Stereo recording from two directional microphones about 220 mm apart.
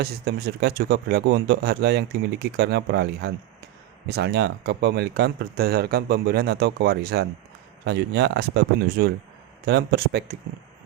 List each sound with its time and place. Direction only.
0.0 s speech: 45° right (ahead or behind)